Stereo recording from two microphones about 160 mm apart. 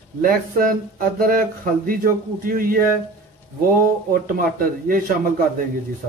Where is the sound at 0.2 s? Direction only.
65° right (ahead or behind).